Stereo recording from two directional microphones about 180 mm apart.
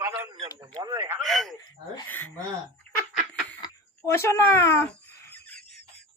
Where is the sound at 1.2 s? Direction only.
Centre (ahead or behind).